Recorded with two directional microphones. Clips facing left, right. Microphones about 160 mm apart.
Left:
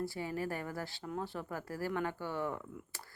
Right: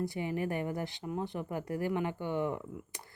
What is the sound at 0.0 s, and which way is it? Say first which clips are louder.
Speech: right 3 dB; 20° right (ahead or behind).